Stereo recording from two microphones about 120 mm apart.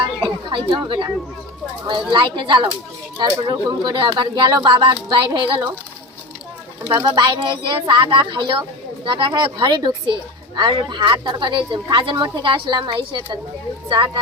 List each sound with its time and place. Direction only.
0.7 s speech: 40° right (ahead or behind)
6.9 s speech: 40° right (ahead or behind)